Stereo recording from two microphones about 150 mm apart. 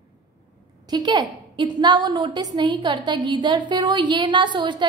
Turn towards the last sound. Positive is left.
turn(degrees=-30)  # may be behind; listen again after turning